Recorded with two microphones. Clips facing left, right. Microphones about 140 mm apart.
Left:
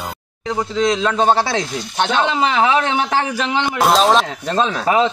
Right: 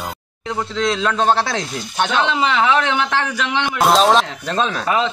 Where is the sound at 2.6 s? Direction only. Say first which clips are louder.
Left 2 dB; 15° left (ahead or behind).